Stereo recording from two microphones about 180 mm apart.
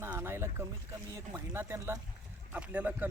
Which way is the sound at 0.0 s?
15° right (ahead or behind).